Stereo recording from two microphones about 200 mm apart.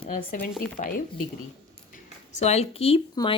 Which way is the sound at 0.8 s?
45° left (ahead or behind).